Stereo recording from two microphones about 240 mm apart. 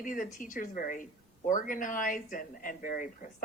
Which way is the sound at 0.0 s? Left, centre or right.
Left.